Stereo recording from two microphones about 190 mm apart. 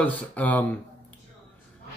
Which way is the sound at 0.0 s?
10° left (ahead or behind).